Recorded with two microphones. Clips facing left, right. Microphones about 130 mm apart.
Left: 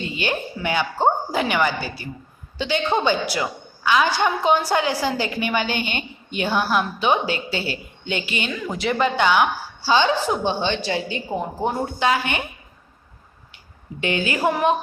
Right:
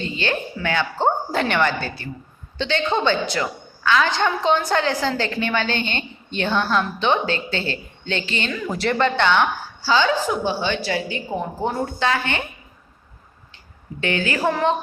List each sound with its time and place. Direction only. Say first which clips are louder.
0.0 s a woman's voice: right 1 dB; 15° left (ahead or behind)
14.0 s a woman's voice: even; 15° left (ahead or behind)